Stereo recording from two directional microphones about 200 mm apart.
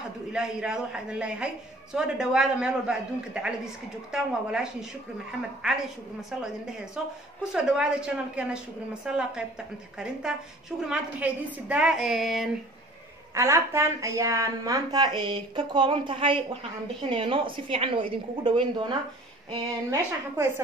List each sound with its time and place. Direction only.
0.3 s a woman's voice: 5° right (ahead or behind)
13.3 s speech: 15° right (ahead or behind)
19.5 s a woman's voice: 15° right (ahead or behind)